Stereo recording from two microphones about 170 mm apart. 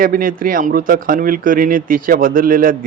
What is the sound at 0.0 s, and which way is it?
Speech, 55° right (ahead or behind).